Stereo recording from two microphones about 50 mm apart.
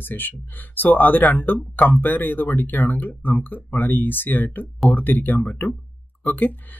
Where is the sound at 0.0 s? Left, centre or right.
Left.